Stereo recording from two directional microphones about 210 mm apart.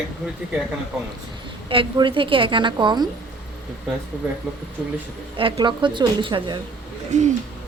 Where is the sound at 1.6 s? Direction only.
25° right (ahead or behind).